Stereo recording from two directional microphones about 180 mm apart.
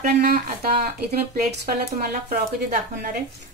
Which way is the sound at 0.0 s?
55° right (ahead or behind).